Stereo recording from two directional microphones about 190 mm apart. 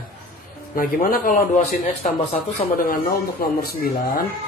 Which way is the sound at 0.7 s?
45° left (ahead or behind).